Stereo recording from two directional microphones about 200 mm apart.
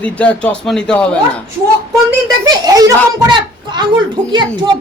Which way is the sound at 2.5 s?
20° right (ahead or behind).